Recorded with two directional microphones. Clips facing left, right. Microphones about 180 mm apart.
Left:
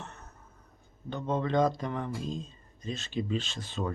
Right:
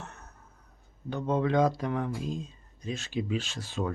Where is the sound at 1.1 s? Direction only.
10° right (ahead or behind).